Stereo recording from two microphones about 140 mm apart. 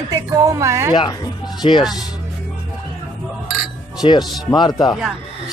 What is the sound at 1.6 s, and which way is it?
Speech, 35° left (ahead or behind).